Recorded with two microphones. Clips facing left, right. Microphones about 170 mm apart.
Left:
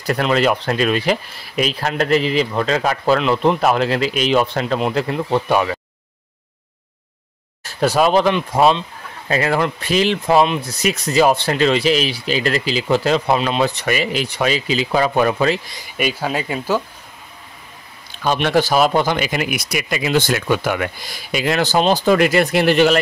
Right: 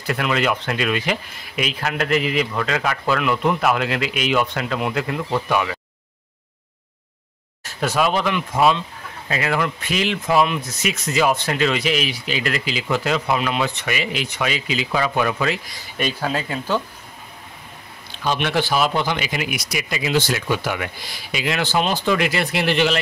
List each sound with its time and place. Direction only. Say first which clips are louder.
0.0 s speech: left 5 dB; 40° left (ahead or behind)
7.6 s speech: left 5 dB; 35° left (ahead or behind)
16.0 s speech: left 2 dB; 10° left (ahead or behind)
18.2 s speech: left 5 dB; 45° left (ahead or behind)